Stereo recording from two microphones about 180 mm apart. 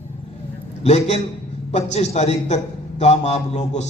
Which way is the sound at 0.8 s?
35° left (ahead or behind).